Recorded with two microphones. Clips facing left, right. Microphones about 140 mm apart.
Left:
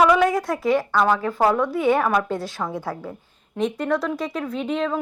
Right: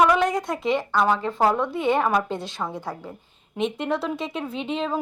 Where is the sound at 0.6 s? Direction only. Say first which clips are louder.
Left 4 dB; 20° right (ahead or behind).